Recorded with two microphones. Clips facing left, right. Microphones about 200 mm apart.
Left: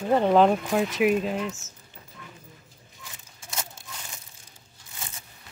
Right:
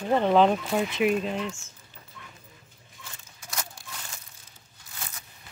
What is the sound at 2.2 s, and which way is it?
Dog, 35° left (ahead or behind).